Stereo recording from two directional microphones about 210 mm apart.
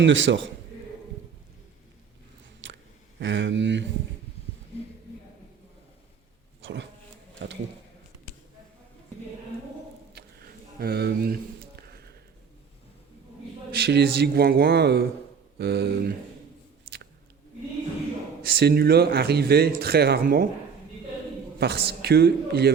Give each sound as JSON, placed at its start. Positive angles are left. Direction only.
{"t": 0.0, "sound": "speech", "side_deg": -60}
{"t": 2.6, "sound": "a sound", "side_deg": -60}
{"t": 3.2, "sound": "speech", "side_deg": -60}
{"t": 6.6, "sound": "a sound", "side_deg": -60}
{"t": 7.4, "sound": "speech", "side_deg": -60}
{"t": 10.2, "sound": "a sound", "side_deg": -50}
{"t": 13.7, "sound": "speech", "side_deg": -50}
{"t": 18.4, "sound": "speech", "side_deg": -45}
{"t": 21.6, "sound": "speech", "side_deg": -50}